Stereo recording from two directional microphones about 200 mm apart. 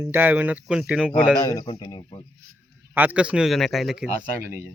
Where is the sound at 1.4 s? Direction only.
20° left (ahead or behind).